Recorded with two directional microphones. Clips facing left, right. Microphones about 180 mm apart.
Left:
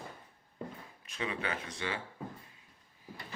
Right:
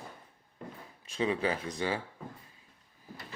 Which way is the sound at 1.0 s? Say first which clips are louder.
Right 7 dB; 30° right (ahead or behind).